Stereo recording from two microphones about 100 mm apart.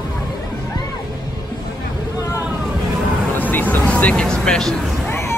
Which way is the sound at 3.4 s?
15° left (ahead or behind).